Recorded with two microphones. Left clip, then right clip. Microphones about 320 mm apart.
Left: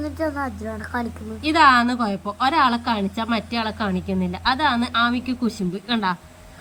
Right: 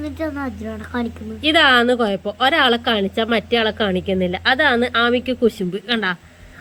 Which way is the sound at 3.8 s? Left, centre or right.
Right.